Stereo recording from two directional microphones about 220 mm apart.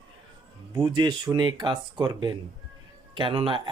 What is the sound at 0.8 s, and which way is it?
Speech, 20° right (ahead or behind).